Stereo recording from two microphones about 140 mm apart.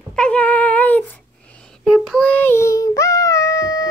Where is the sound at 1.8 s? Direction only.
Centre (ahead or behind); by 3.9 s 25° left (ahead or behind).